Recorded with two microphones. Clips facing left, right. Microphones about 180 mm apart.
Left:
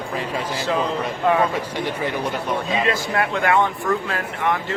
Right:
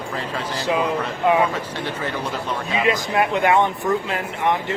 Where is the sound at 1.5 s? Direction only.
15° left (ahead or behind).